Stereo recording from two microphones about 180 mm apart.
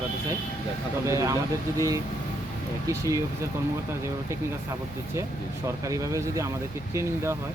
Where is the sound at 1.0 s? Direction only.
15° right (ahead or behind).